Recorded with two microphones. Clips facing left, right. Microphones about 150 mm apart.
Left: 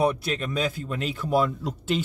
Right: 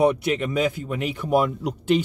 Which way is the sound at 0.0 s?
20° right (ahead or behind).